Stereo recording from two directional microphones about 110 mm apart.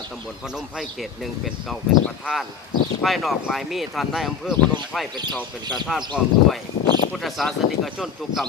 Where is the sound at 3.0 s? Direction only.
Centre (ahead or behind).